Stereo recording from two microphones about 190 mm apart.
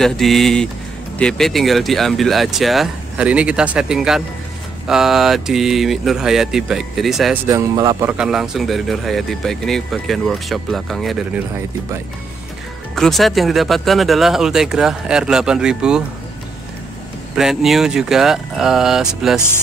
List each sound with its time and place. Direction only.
0.0 s speech: centre (ahead or behind)
7.4 s speech: 20° right (ahead or behind)
8.1 s speech: 5° right (ahead or behind)
12.9 s speech: centre (ahead or behind)
17.4 s speech: centre (ahead or behind)